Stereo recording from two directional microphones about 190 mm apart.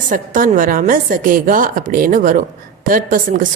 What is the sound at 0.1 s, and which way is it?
A woman's voice, 45° right (ahead or behind).